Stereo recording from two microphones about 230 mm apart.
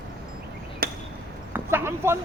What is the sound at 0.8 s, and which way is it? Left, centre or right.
Chop, right.